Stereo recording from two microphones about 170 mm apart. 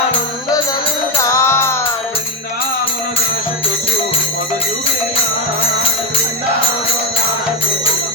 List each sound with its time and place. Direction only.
1.1 s music: 15° left (ahead or behind)